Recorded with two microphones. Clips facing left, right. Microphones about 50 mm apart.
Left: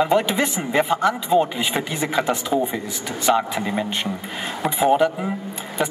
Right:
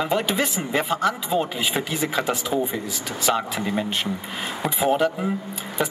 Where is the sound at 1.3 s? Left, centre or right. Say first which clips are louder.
Left 4 dB; centre.